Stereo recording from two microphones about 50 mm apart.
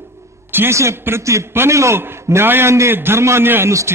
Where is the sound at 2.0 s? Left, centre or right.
Right.